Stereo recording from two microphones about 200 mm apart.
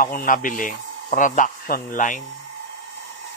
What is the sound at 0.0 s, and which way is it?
Speech, 45° left (ahead or behind).